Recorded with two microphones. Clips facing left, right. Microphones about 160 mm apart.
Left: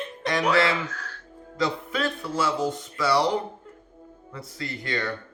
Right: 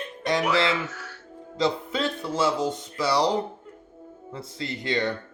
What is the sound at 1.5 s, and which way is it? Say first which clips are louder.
A man's voice: right 2 dB; 25° right (ahead or behind).